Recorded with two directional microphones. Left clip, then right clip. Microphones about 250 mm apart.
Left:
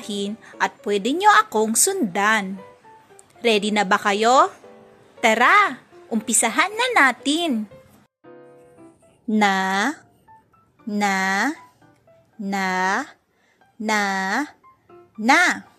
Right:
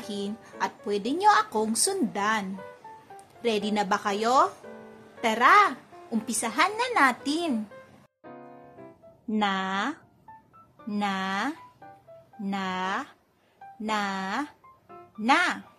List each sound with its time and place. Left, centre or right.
0.0 s a woman's voice: left
9.3 s speech: left